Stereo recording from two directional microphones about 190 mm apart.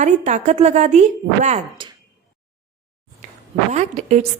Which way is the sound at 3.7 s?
35° right (ahead or behind).